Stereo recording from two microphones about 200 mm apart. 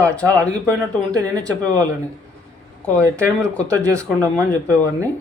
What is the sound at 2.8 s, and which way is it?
Speech, 5° left (ahead or behind).